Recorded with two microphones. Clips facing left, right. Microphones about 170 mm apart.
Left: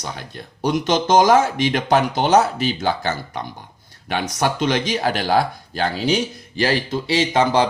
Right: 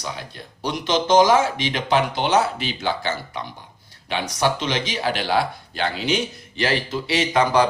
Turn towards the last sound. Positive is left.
turn(degrees=25)  # may be behind; listen again after turning